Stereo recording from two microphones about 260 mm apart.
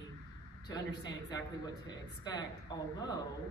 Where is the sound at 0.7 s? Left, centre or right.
Centre.